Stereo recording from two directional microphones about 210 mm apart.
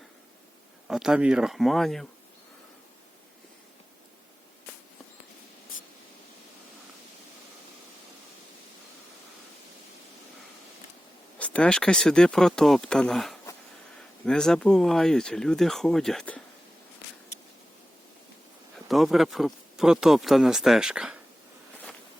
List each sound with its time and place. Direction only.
0.9 s speech: centre (ahead or behind)
11.3 s speech: 5° left (ahead or behind)
18.9 s speech: centre (ahead or behind)